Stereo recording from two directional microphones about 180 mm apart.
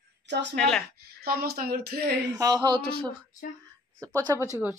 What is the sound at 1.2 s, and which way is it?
Speech, 55° right (ahead or behind).